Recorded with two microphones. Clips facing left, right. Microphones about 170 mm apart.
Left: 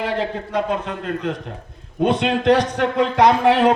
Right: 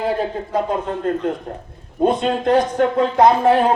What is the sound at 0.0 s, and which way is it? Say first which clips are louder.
A man's voice: right 2 dB; 80° left.